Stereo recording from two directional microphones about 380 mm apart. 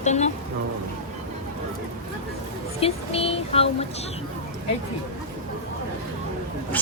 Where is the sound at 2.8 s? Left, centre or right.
Centre.